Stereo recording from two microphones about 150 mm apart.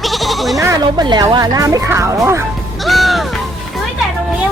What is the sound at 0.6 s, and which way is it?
Speech, 25° right (ahead or behind).